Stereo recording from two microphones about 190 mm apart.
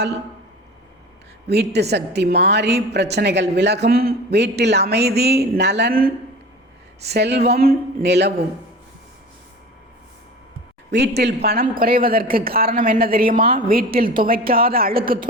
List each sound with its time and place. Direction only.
1.5 s a woman's voice: 60° right (ahead or behind)
10.9 s a woman's voice: 60° right (ahead or behind)